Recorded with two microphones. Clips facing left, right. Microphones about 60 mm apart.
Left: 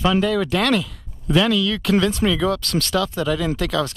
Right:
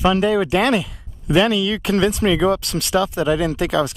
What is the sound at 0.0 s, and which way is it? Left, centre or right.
Speech, centre.